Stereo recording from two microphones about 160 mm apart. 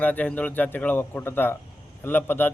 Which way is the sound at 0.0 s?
10° left (ahead or behind).